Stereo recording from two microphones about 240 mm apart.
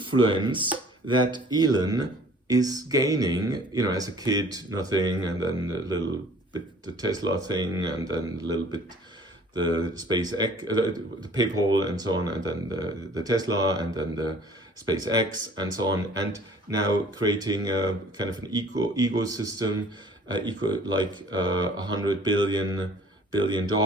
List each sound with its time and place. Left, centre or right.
0.0 s speech: centre